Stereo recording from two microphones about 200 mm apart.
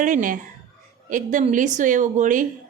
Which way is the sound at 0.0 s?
40° right (ahead or behind).